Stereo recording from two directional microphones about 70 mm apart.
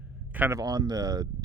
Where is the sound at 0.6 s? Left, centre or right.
Right.